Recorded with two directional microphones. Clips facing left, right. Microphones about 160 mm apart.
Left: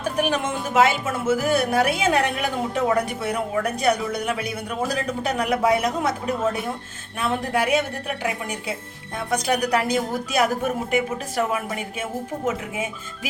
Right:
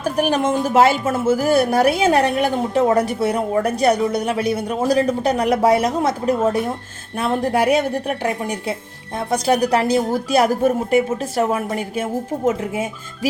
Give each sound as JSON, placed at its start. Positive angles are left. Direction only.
{"t": 0.0, "sound": "a woman's voice", "side_deg": -35}